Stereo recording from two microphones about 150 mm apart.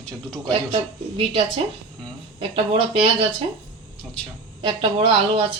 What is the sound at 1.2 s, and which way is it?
A woman's voice, 40° right (ahead or behind).